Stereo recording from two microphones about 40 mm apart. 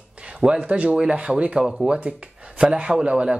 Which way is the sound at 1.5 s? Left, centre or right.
Centre.